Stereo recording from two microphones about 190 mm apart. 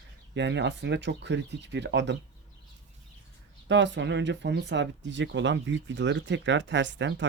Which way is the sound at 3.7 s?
70° right (ahead or behind).